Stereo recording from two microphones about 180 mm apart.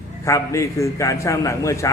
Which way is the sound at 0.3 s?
15° left (ahead or behind).